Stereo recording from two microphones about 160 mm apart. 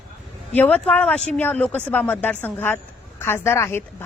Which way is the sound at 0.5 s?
10° left (ahead or behind).